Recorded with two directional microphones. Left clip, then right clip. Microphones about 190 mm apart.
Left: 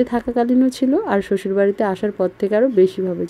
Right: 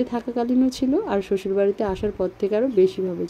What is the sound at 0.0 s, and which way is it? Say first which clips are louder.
Speech: left 6 dB; 20° left (ahead or behind).